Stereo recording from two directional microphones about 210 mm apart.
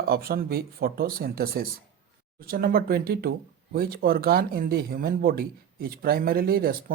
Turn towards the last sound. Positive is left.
turn(degrees=-45)  # may be behind; listen again after turning